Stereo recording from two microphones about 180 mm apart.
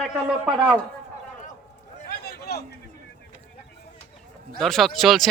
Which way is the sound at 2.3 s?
60° left (ahead or behind).